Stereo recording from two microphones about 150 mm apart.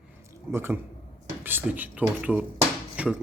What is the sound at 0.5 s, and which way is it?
Speech, 15° right (ahead or behind).